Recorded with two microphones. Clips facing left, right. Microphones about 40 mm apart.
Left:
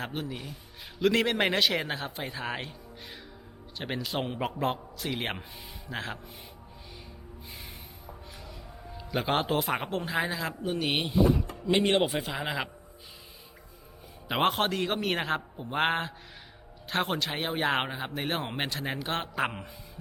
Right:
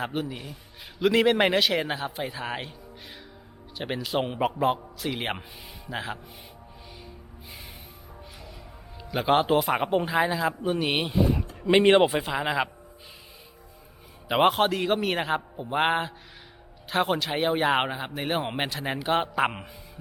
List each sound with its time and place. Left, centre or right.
0.0 s speech: centre
9.0 s speech: centre
10.1 s speech: centre
11.6 s a man's voice: centre
12.0 s speech: centre
14.3 s a man's voice: centre